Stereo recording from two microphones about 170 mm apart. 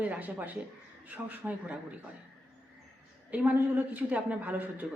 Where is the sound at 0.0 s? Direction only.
10° right (ahead or behind).